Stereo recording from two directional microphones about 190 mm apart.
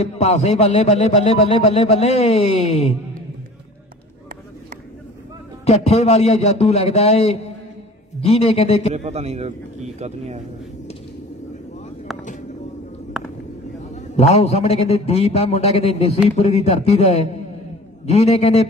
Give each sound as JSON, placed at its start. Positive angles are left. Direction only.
{"t": 0.0, "sound": "speech", "side_deg": 35}
{"t": 5.7, "sound": "speech", "side_deg": 35}
{"t": 8.9, "sound": "a man's voice", "side_deg": -35}
{"t": 12.1, "sound": "vehicle", "side_deg": 0}
{"t": 13.2, "sound": "a sound", "side_deg": 0}
{"t": 13.9, "sound": "speech", "side_deg": 35}